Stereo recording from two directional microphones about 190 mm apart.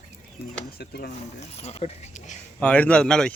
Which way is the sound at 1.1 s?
35° left (ahead or behind).